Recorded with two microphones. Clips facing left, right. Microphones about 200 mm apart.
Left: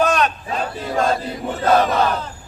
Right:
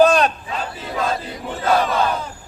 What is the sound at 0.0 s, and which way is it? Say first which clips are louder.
Battle cry: right 4 dB; 30° right (ahead or behind).